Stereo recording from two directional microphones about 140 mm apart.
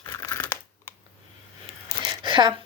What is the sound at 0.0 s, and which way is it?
Crumpling, 20° left (ahead or behind).